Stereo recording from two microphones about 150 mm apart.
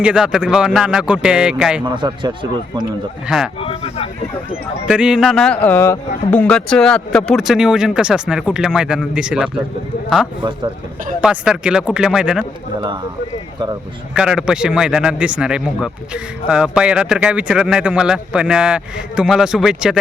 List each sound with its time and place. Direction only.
0.0 s speech: 5° right (ahead or behind)
1.8 s a man's voice: 30° right (ahead or behind)
3.2 s a man's voice: 5° right (ahead or behind)
3.6 s speech: 40° left (ahead or behind)
4.9 s a man's voice: 5° right (ahead or behind)
11.2 s a man's voice: 5° right (ahead or behind)
14.1 s a man's voice: 5° right (ahead or behind)